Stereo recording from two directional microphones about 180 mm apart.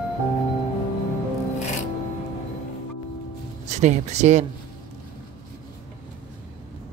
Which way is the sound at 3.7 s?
40° right (ahead or behind).